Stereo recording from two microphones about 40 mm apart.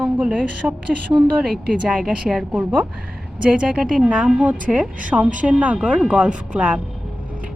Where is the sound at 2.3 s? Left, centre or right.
Centre.